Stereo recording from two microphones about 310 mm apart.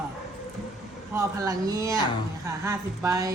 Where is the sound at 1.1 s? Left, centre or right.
Centre.